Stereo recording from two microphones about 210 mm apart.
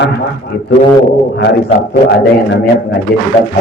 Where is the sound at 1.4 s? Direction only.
55° left (ahead or behind).